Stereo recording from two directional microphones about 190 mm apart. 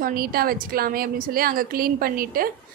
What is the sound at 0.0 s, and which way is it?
A woman's voice, 50° right (ahead or behind).